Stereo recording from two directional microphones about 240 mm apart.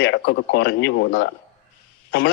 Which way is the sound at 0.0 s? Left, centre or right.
Left.